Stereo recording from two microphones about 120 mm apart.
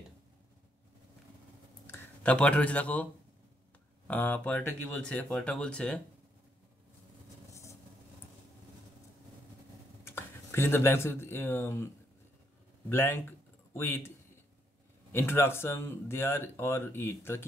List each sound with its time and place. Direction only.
2.2 s speech: 10° left (ahead or behind)
4.1 s speech: 15° left (ahead or behind)
10.0 s speech: 20° left (ahead or behind)
12.9 s speech: 20° left (ahead or behind)
15.1 s speech: 20° left (ahead or behind)